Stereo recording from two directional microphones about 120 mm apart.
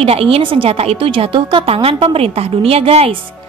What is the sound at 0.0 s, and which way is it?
A woman's voice, 55° right (ahead or behind).